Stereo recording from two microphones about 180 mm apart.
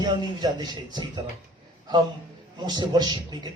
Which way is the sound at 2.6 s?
25° right (ahead or behind).